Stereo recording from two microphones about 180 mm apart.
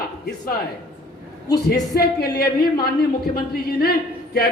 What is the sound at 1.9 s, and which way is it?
A man's voice, 60° left (ahead or behind).